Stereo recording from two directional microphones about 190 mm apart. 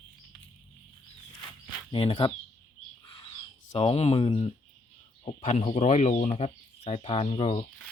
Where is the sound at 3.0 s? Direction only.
25° left (ahead or behind).